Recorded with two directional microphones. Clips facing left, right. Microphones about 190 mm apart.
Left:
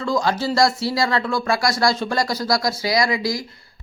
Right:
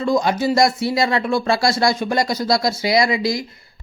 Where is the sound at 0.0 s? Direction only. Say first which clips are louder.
Right 3 dB; 20° right (ahead or behind).